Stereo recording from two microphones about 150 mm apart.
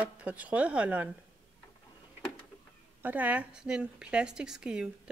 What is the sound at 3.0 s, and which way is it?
Speech, 10° right (ahead or behind).